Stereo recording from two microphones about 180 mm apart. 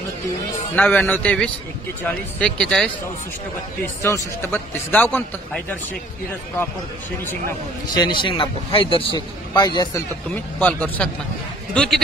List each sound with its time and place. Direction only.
0.7 s a man's voice: 10° left (ahead or behind)
3.8 s a man's voice: 15° left (ahead or behind)
7.9 s speech: 25° left (ahead or behind)
10.3 s a man's voice: 10° left (ahead or behind)